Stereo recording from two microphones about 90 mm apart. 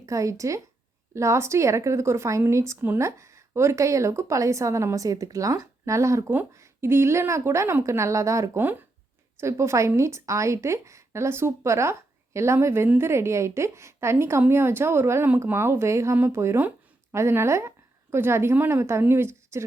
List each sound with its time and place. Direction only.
0.0 s a woman's voice: 35° right (ahead or behind)